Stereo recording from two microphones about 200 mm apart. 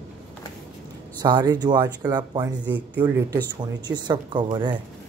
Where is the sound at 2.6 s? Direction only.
10° right (ahead or behind).